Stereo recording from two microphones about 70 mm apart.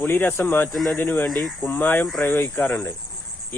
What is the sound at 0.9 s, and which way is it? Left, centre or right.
Speech, left.